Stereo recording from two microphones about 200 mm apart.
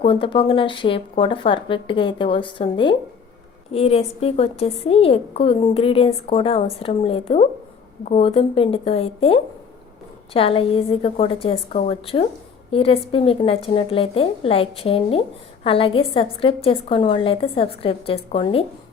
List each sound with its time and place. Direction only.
0.0 s a woman's voice: 25° left (ahead or behind)